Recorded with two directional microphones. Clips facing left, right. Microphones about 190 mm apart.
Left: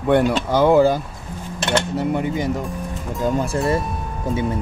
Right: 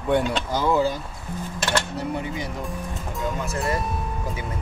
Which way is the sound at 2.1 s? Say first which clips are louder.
Left 8 dB; 50° left (ahead or behind).